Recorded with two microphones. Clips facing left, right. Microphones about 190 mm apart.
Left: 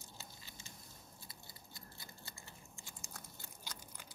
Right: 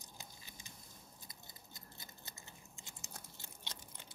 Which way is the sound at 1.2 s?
20° right (ahead or behind).